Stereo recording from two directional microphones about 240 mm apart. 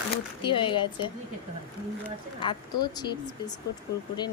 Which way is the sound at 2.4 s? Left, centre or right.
Centre.